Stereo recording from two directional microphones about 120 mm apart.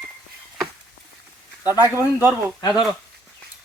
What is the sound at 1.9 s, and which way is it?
Speech, 20° right (ahead or behind).